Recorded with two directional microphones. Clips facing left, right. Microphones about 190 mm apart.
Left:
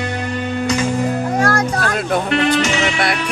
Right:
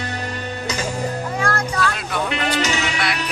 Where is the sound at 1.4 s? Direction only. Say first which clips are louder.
Left 2 dB; 45° left (ahead or behind).